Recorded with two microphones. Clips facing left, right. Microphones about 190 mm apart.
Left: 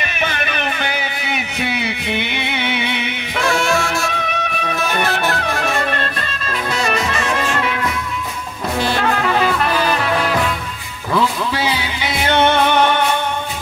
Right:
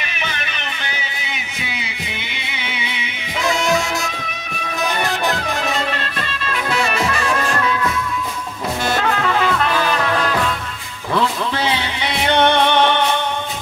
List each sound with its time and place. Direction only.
0.0 s music: 50° left (ahead or behind)
3.4 s music: 20° right (ahead or behind)
4.1 s music: 60° left (ahead or behind); by 7.2 s 40° left (ahead or behind)
11.1 s music: 5° left (ahead or behind)